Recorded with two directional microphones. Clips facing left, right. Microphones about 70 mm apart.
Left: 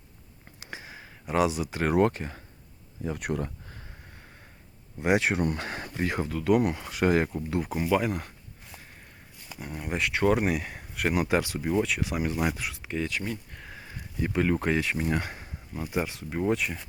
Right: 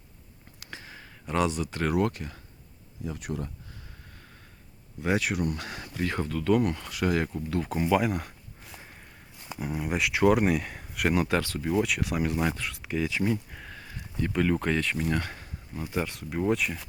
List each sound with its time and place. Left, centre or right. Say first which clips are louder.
0.6 s a sound: left 2 dB; centre
1.9 s speech: left 5 dB; left
3.0 s speech: left 4 dB; left
4.9 s speech: left 3 dB; left
5.4 s speech: left 2 dB; left
6.1 s speech: left 1 dB; centre
6.9 s speech: left 4 dB; left
7.3 s speech: even; centre
11.7 s speech: right 1 dB; centre
13.1 s speech: right 5 dB; centre
13.6 s a sound: even; centre
14.3 s speech: left 1 dB; centre
15.1 s speech: even; centre
16.0 s speech: even; centre